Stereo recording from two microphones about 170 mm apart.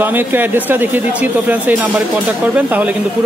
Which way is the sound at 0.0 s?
10° right (ahead or behind).